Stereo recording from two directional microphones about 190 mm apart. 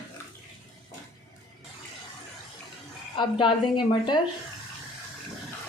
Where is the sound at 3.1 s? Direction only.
25° left (ahead or behind).